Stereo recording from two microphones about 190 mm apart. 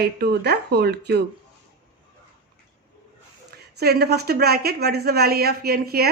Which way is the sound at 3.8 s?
55° right (ahead or behind).